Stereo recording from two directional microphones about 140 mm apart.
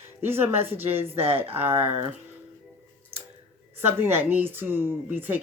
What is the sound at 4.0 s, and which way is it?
Speech, 15° right (ahead or behind).